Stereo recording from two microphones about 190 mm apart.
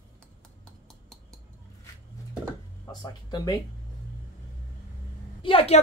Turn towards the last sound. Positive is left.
turn(degrees=30)  # may be behind; listen again after turning